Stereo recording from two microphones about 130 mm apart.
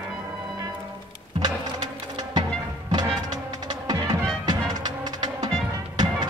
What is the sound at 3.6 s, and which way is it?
Music, 30° right (ahead or behind).